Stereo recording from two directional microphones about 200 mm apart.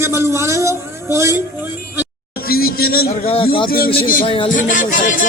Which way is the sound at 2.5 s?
50° left (ahead or behind).